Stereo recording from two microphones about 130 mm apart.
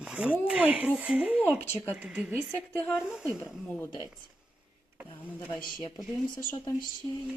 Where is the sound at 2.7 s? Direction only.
10° left (ahead or behind).